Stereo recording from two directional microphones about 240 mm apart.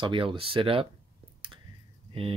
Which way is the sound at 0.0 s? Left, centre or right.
Right.